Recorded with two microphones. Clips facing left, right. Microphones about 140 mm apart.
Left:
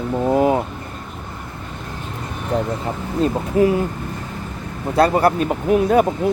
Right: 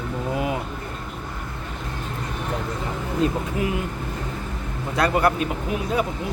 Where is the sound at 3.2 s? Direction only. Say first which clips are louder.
Left 8 dB; 35° left (ahead or behind).